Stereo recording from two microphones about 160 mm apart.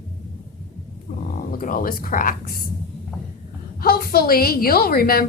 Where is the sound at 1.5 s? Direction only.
60° left (ahead or behind).